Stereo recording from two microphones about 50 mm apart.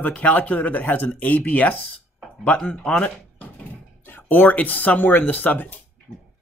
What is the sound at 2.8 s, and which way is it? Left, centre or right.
Speech, centre.